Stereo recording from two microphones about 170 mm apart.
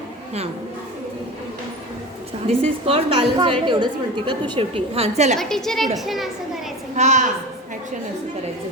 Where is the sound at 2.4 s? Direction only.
35° right (ahead or behind).